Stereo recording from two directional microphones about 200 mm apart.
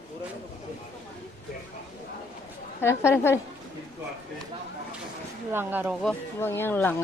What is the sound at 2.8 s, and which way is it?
Speech, 10° left (ahead or behind).